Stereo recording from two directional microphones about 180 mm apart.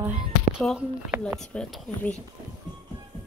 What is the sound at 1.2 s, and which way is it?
Speech, 5° left (ahead or behind).